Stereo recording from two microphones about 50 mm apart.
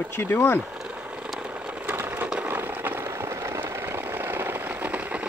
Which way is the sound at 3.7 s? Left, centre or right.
Right.